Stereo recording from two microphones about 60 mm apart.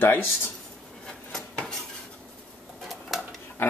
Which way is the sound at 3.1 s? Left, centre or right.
Centre.